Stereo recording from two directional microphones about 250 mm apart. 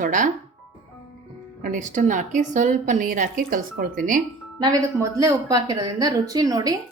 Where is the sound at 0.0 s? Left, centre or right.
Right.